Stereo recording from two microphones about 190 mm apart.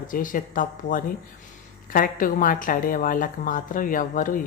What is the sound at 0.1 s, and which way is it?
Speech, 45° left (ahead or behind).